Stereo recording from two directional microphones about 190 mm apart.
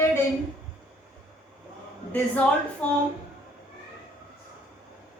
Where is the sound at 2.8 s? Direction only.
5° left (ahead or behind).